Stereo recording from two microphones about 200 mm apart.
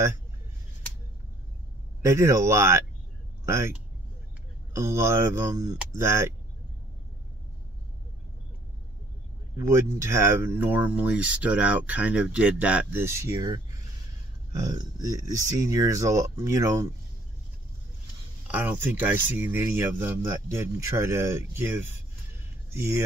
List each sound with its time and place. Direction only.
2.0 s speech: 15° right (ahead or behind)
4.7 s speech: 15° right (ahead or behind)
9.6 s speech: 15° right (ahead or behind)
14.6 s speech: 20° right (ahead or behind)
18.5 s speech: 10° right (ahead or behind)